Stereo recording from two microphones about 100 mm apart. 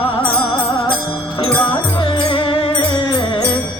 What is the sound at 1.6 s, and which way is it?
Music, 55° left (ahead or behind).